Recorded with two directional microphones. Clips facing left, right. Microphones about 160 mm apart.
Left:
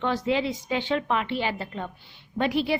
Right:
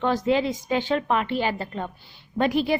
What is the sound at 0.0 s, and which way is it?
A woman's voice, 45° right (ahead or behind).